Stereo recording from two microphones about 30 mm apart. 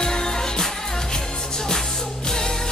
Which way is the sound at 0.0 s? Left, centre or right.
Left.